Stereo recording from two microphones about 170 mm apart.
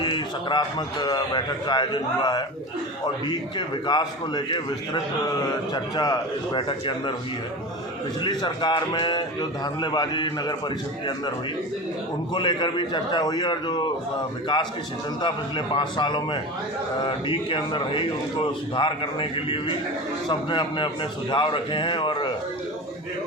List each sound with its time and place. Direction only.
0.0 s speech: 25° left (ahead or behind)
3.8 s speech: 25° left (ahead or behind)
5.7 s speech: 25° left (ahead or behind)
8.2 s speech: 25° left (ahead or behind)
12.3 s a man's voice: 30° left (ahead or behind)